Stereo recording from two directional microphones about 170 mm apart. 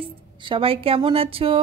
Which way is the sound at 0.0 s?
30° right (ahead or behind).